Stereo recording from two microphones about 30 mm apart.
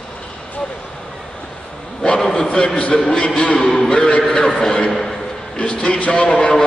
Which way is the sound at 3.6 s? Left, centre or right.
Centre.